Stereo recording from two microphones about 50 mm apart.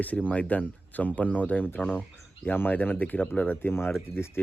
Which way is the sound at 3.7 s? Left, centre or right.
Left.